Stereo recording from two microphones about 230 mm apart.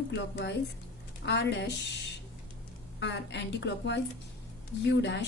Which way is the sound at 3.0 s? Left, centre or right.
Left.